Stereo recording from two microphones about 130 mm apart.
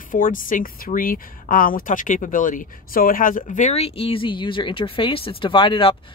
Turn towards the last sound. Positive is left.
turn(degrees=40)  # may be behind; listen again after turning